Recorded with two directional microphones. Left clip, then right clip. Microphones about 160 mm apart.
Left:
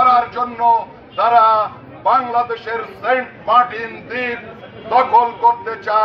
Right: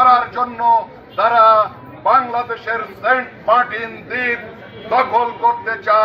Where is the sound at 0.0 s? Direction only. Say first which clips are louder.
Right 1 dB; 5° right (ahead or behind).